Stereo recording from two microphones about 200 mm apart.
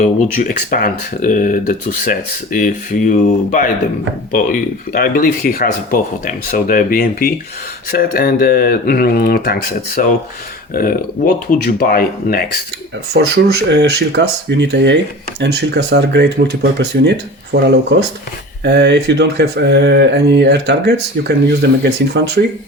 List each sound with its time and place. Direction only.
0.4 s speech: 45° left (ahead or behind)
13.1 s speech: 60° right (ahead or behind)